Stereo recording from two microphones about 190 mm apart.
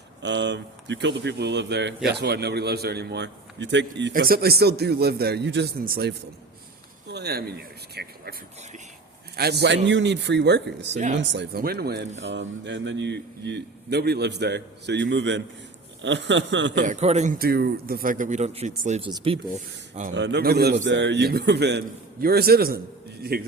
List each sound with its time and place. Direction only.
0.2 s a man's voice: 70° right (ahead or behind)
4.1 s a man's voice: 50° right (ahead or behind)
10.9 s a man's voice: 40° right (ahead or behind)
11.2 s a man's voice: 65° right (ahead or behind)
12.3 s a man's voice: 70° right (ahead or behind)
16.8 s a man's voice: 35° right (ahead or behind)
17.3 s speech: 55° right (ahead or behind); by 18.7 s 35° right (ahead or behind)
18.7 s speech: 45° right (ahead or behind)
18.9 s speech: 30° right (ahead or behind)
20.1 s a man's voice: 65° right (ahead or behind)
20.8 s a man's voice: 70° right (ahead or behind); by 22.8 s 50° right (ahead or behind)